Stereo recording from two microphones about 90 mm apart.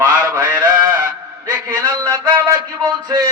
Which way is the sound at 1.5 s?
25° right (ahead or behind).